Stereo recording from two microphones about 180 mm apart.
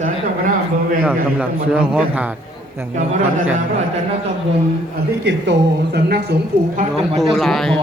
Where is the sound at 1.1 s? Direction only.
10° right (ahead or behind).